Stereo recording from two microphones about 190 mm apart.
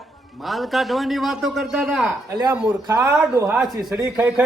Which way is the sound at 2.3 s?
20° right (ahead or behind).